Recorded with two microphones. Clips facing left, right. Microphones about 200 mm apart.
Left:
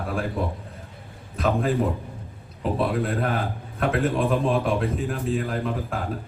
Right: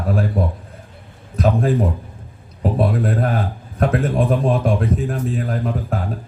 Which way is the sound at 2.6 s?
45° right (ahead or behind).